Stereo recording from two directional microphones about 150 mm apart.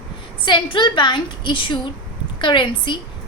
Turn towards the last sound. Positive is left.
turn(degrees=30)  # may be behind; listen again after turning